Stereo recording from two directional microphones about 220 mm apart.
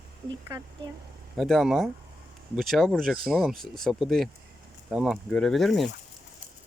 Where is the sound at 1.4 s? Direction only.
Centre (ahead or behind).